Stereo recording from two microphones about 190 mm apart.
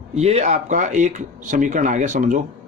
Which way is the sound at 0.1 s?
35° right (ahead or behind).